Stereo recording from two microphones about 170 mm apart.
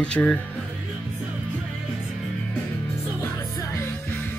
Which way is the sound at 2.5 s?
10° left (ahead or behind).